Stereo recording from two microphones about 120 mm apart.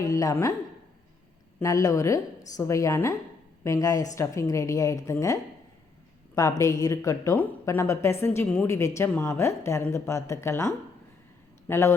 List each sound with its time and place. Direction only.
0.0 s speech: 30° left (ahead or behind)
1.5 s speech: 25° left (ahead or behind)